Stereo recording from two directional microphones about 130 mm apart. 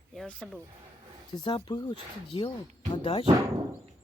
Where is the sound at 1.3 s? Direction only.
35° left (ahead or behind).